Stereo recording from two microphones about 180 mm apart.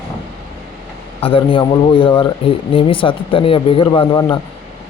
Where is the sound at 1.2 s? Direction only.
30° left (ahead or behind).